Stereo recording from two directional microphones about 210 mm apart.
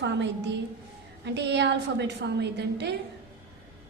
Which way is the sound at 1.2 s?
55° right (ahead or behind).